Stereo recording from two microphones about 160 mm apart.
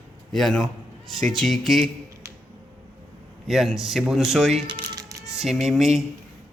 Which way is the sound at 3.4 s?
Centre (ahead or behind).